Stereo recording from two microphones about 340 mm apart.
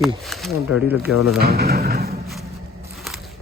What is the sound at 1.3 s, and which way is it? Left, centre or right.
Speech, right.